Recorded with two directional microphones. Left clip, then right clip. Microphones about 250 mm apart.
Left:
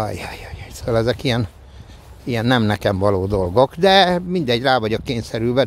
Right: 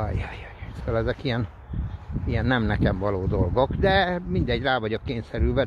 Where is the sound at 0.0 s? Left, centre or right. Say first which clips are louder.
Left 7 dB; left.